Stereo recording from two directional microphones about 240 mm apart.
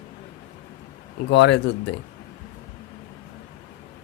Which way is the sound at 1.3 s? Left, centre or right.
Left.